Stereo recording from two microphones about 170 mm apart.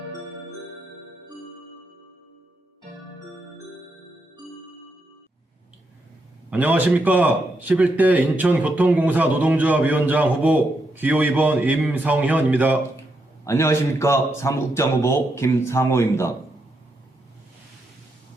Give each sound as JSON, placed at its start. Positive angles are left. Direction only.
{"t": 6.5, "sound": "speech", "side_deg": -10}
{"t": 13.4, "sound": "a man's voice", "side_deg": 15}